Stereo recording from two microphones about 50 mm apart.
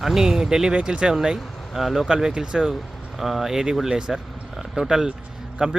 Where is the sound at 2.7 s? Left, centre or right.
Centre.